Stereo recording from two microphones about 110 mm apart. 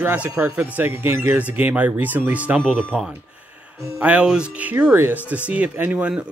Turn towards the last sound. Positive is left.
turn(degrees=-10)  # may be behind; listen again after turning